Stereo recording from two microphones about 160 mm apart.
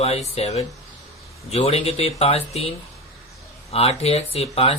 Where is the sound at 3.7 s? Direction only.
40° left (ahead or behind).